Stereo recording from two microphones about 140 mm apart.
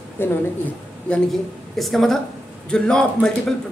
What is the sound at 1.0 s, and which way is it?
Speech, 5° left (ahead or behind).